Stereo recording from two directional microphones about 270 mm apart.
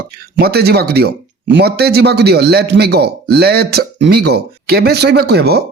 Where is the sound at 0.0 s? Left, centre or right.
Right.